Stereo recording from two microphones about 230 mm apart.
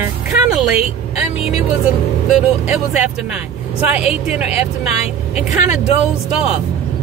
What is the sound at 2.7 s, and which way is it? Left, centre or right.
Speech, centre.